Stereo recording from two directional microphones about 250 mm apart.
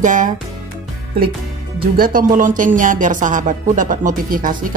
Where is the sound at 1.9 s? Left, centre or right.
Right.